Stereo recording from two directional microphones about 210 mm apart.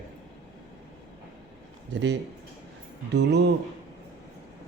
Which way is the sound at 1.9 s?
55° right (ahead or behind).